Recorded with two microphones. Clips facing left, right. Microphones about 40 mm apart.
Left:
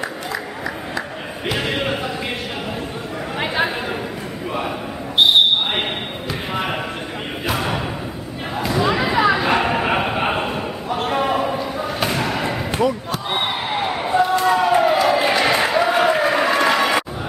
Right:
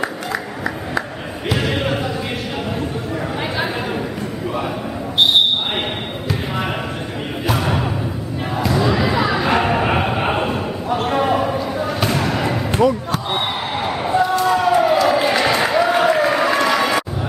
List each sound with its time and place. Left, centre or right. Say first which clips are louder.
1.5 s basketball bounce: right 2 dB; centre
3.3 s chatter: left 4 dB; centre
7.4 s music: right 2 dB; centre
8.5 s a sound: right 1 dB; centre
13.3 s basketball bounce: left 2 dB; centre
14.4 s a sound: right 1 dB; centre